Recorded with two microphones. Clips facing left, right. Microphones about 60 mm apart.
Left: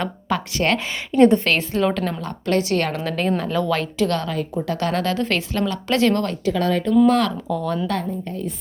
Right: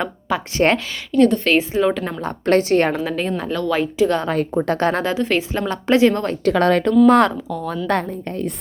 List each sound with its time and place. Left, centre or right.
0.0 s speech: centre
0.5 s a woman's voice: right
1.1 s a woman's voice: left
1.5 s a woman's voice: centre
2.2 s a woman's voice: right
3.1 s a woman's voice: centre
4.3 s a woman's voice: right
5.3 s a woman's voice: centre
5.6 s a woman's voice: right
6.0 s a woman's voice: centre
6.4 s speech: right
7.1 s a woman's voice: right
7.5 s a woman's voice: centre
7.9 s a woman's voice: right